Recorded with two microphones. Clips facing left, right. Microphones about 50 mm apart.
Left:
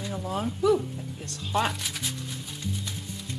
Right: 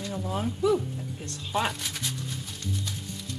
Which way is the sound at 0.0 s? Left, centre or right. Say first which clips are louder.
Even; centre.